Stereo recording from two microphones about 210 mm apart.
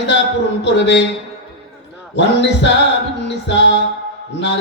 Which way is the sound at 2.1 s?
55° left (ahead or behind).